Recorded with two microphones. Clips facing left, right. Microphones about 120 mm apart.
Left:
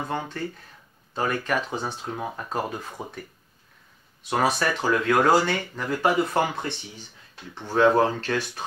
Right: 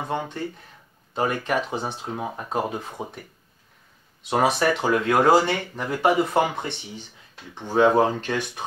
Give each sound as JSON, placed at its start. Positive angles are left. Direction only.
{"t": 0.1, "sound": "speech", "side_deg": -20}
{"t": 4.3, "sound": "speech", "side_deg": -20}